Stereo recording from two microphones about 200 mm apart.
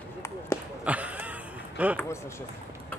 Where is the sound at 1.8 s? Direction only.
5° right (ahead or behind).